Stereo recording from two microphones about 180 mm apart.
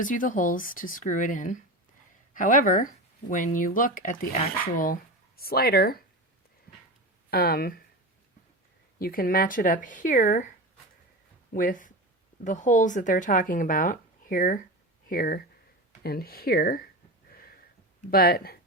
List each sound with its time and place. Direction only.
0.0 s speech: 45° left (ahead or behind)
7.3 s speech: 60° left (ahead or behind)
9.0 s speech: 55° left (ahead or behind)
11.5 s speech: 50° left (ahead or behind)
17.3 s a sound: 55° left (ahead or behind)
18.1 s speech: 60° left (ahead or behind)